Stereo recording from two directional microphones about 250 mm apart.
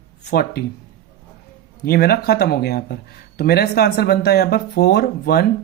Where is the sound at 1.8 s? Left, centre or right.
Left.